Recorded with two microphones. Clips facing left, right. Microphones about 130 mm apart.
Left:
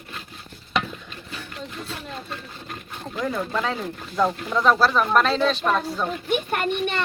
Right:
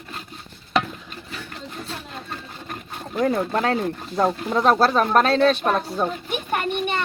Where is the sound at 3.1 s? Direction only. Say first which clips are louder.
Right 5 dB; 50° right (ahead or behind).